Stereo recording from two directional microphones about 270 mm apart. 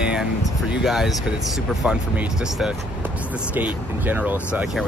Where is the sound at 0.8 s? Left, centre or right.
Centre.